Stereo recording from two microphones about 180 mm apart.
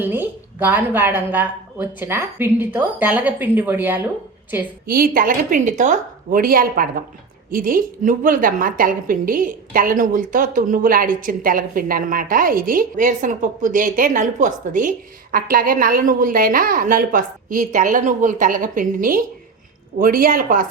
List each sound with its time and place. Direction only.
0.0 s a woman's voice: 10° right (ahead or behind)
4.9 s a woman's voice: 55° right (ahead or behind)